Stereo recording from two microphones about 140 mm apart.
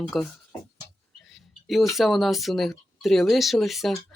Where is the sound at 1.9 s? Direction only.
Centre (ahead or behind).